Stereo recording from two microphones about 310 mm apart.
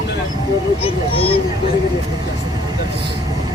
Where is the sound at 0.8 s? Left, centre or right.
Centre.